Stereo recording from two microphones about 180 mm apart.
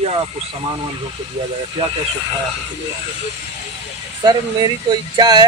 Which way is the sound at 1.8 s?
35° right (ahead or behind).